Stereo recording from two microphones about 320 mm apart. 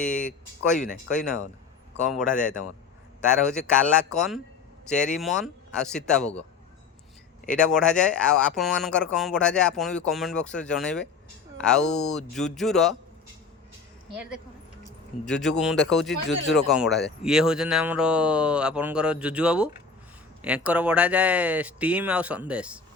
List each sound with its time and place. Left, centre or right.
0.0 s speech: centre
0.8 s speech: left
2.1 s speech: centre
7.4 s speech: centre
14.2 s speech: centre